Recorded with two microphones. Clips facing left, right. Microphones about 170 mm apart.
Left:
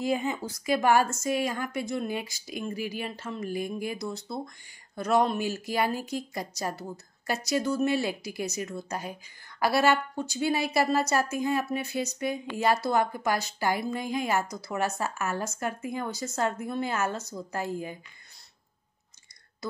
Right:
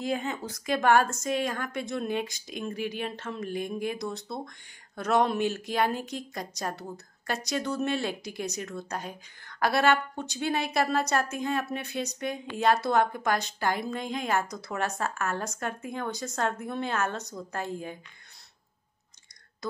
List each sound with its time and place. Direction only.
0.0 s speech: 5° left (ahead or behind)